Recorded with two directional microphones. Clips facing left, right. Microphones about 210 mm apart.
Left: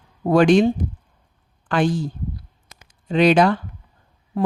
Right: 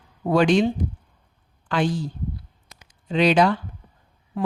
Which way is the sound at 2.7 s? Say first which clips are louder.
Left 3 dB; 50° left (ahead or behind).